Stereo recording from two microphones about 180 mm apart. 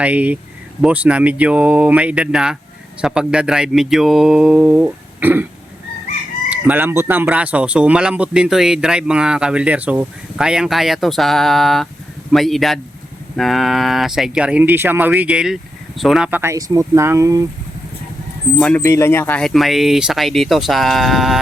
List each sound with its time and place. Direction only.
0.0 s speech: 10° right (ahead or behind)
6.5 s speech: 10° right (ahead or behind)
18.5 s speech: 5° left (ahead or behind)